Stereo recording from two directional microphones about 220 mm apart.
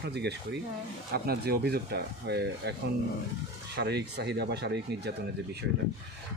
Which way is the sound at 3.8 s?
50° right (ahead or behind).